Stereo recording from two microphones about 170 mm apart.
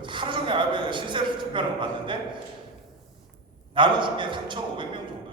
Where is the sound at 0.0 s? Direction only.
30° right (ahead or behind).